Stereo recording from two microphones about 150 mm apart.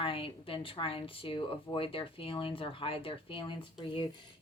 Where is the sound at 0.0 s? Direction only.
35° left (ahead or behind).